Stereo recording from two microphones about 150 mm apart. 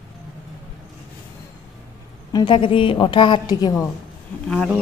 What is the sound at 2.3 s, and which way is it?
A woman's voice, 35° left (ahead or behind).